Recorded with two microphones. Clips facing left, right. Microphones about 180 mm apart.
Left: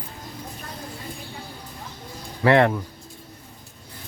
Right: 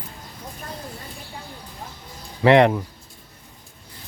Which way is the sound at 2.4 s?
20° right (ahead or behind).